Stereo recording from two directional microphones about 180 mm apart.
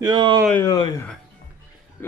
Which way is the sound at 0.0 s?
25° right (ahead or behind).